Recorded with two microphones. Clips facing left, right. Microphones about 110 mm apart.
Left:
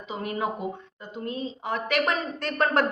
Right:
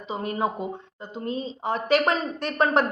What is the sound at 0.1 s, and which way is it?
A woman's voice, 30° right (ahead or behind).